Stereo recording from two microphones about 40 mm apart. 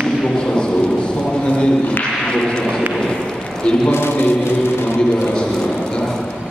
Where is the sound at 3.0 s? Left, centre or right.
Centre.